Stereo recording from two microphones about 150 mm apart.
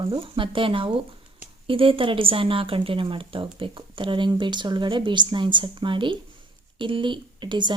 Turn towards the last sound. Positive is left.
turn(degrees=-30)  # may be behind; listen again after turning